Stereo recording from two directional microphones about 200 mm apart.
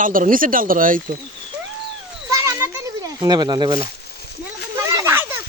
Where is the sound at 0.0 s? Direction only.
45° right (ahead or behind).